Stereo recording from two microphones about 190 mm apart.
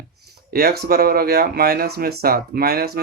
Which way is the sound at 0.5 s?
55° right (ahead or behind).